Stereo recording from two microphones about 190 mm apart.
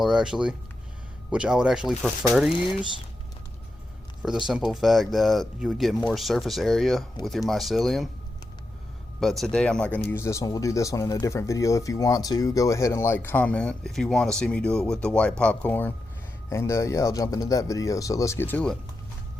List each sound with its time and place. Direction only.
0.0 s speech: 5° right (ahead or behind)
4.2 s speech: 5° right (ahead or behind)
9.2 s speech: centre (ahead or behind)